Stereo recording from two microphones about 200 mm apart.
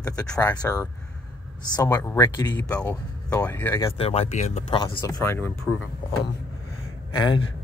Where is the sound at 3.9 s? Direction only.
30° left (ahead or behind).